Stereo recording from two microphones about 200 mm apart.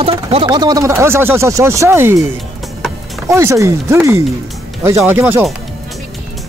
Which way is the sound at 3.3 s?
15° right (ahead or behind).